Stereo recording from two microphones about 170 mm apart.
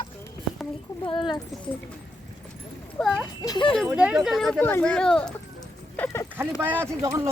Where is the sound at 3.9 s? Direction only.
5° right (ahead or behind).